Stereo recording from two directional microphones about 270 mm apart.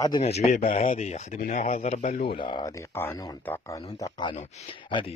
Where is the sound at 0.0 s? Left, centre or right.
Centre.